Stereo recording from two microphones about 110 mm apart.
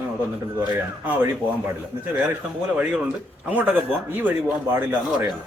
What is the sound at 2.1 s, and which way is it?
Speech, 15° right (ahead or behind).